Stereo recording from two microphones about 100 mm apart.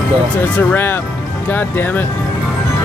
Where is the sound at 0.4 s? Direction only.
20° left (ahead or behind).